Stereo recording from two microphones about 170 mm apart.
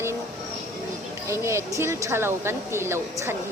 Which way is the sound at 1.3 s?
15° right (ahead or behind).